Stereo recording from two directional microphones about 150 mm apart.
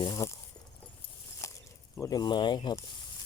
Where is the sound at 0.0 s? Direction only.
25° left (ahead or behind).